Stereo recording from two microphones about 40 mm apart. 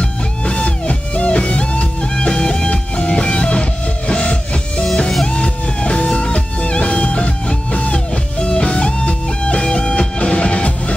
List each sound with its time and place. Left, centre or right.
0.0 s music: left